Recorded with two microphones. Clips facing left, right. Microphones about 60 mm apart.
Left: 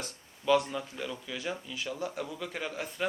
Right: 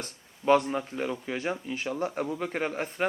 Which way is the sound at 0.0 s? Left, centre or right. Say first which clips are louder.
Right 5 dB; right.